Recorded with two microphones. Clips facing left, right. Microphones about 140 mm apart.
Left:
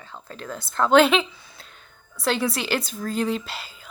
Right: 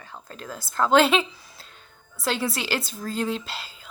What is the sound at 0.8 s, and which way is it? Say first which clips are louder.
Speech: left 2 dB; centre (ahead or behind).